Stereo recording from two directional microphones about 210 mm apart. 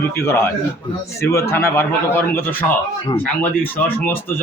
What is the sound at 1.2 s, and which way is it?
A man's voice, 15° left (ahead or behind).